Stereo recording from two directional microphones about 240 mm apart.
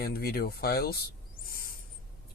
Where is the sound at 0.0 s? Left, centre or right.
Left.